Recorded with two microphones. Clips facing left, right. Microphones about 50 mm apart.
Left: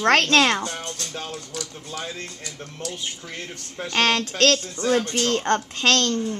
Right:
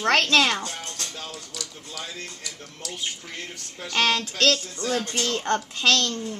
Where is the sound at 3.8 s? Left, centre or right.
Left.